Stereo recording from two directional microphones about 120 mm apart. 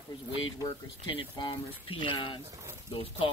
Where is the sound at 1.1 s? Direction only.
40° left (ahead or behind).